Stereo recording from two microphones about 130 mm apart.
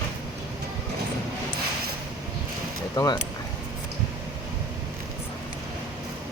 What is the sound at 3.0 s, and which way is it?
Speech, 30° left (ahead or behind).